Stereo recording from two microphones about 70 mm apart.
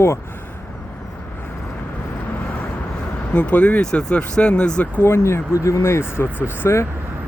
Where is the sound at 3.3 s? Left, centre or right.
Left.